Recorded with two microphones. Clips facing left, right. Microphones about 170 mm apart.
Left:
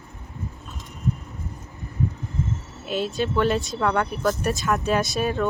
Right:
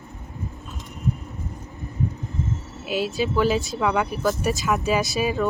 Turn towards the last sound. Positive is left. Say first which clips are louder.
# even
turn(degrees=0)  # may be behind; listen again after turning